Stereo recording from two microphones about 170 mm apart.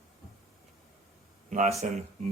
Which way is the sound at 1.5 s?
45° right (ahead or behind).